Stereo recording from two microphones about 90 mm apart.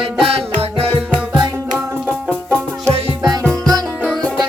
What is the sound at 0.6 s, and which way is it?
Music, 90° right.